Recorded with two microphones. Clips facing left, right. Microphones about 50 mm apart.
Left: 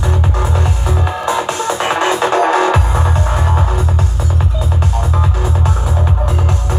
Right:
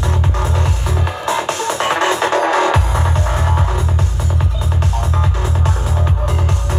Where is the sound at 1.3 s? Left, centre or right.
Left.